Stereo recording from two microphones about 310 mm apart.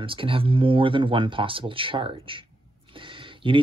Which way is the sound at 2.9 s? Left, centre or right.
Centre.